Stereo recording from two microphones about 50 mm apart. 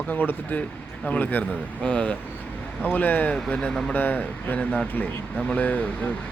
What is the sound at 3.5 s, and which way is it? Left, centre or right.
Speech, centre.